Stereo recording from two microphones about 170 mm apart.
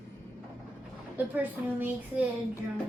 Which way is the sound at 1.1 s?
10° right (ahead or behind).